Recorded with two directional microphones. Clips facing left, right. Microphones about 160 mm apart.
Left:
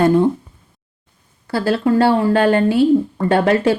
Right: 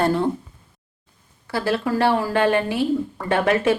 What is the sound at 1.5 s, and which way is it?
Speech, 30° left (ahead or behind).